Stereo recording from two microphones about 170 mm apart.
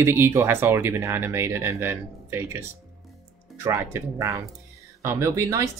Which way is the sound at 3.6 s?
15° right (ahead or behind).